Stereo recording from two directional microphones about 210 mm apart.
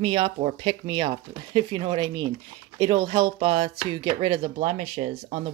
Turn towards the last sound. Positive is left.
turn(degrees=-30)  # may be behind; listen again after turning